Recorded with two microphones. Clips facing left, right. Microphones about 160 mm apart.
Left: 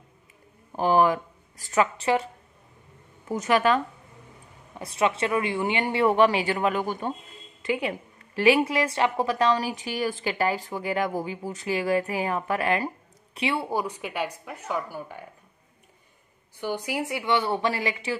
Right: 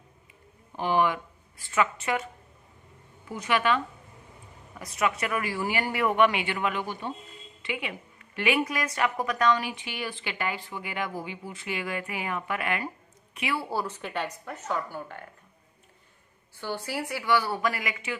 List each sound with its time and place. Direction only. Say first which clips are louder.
0.7 s a woman's voice: left 4 dB; 40° left (ahead or behind)
3.3 s a woman's voice: left 4 dB; 40° left (ahead or behind)
4.7 s a woman's voice: left 4 dB; 30° left (ahead or behind); by 15.2 s 10° left (ahead or behind)
16.5 s a woman's voice: left 4 dB; 15° left (ahead or behind)